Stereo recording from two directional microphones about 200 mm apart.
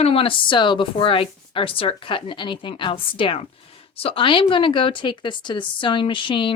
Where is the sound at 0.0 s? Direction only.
25° left (ahead or behind).